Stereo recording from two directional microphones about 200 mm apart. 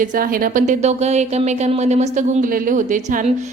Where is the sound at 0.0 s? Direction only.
45° right (ahead or behind).